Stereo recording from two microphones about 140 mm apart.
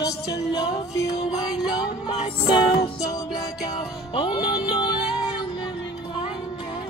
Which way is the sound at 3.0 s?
25° left (ahead or behind).